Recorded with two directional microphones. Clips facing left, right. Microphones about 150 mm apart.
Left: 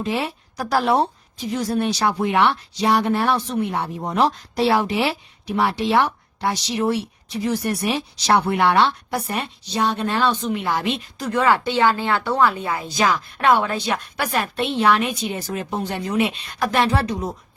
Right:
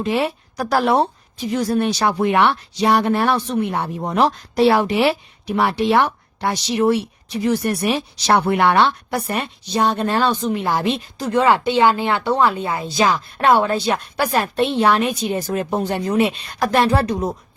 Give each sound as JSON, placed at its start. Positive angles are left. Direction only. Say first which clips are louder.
{"t": 0.1, "sound": "a woman's voice", "louder": "right 4 dB", "side_deg": -60}